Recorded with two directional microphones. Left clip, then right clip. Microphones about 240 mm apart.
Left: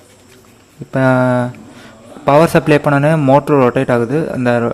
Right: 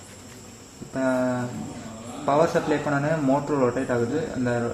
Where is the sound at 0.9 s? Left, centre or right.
Left.